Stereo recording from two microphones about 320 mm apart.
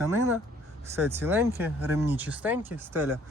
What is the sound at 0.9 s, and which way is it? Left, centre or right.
Speech, centre.